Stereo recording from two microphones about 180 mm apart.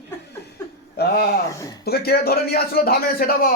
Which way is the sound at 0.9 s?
60° left (ahead or behind).